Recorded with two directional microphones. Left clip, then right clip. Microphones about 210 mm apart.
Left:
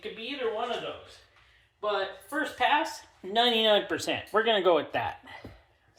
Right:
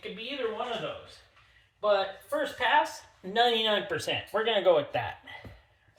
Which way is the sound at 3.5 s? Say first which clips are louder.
Left 3 dB; 35° left (ahead or behind).